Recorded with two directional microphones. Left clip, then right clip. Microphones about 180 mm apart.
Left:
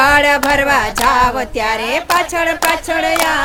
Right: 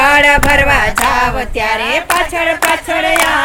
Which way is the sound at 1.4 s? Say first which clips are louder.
Right 2 dB; 10° left (ahead or behind).